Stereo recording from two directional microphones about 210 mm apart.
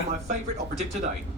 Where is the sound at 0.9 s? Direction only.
35° right (ahead or behind).